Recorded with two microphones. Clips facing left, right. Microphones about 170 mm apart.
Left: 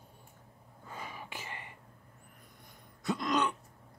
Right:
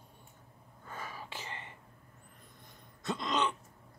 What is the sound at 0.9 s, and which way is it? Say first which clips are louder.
Whispering: even; 15° left (ahead or behind).